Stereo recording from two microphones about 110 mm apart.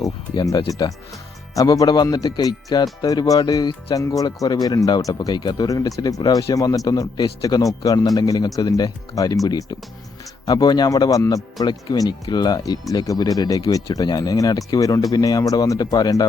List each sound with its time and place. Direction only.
0.7 s speech: 35° left (ahead or behind)